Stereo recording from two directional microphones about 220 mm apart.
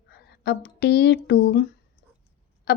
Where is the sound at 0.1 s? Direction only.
50° left (ahead or behind).